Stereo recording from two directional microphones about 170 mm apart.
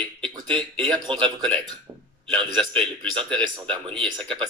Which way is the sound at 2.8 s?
30° right (ahead or behind).